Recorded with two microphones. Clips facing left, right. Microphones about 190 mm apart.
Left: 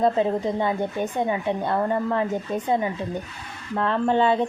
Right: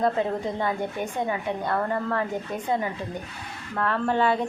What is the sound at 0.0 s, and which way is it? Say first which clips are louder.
A woman's voice: left 3 dB; 20° left (ahead or behind).